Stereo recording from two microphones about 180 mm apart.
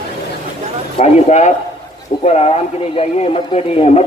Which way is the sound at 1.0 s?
40° left (ahead or behind).